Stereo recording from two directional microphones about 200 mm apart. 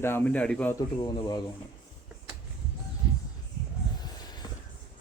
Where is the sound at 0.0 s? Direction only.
10° left (ahead or behind).